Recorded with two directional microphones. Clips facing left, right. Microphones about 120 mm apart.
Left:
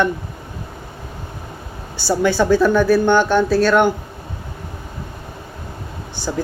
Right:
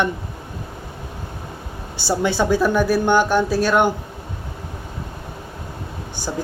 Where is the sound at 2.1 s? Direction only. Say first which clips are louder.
Left 3 dB; 20° right (ahead or behind).